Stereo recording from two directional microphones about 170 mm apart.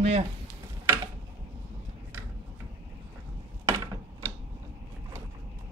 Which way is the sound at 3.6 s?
20° right (ahead or behind).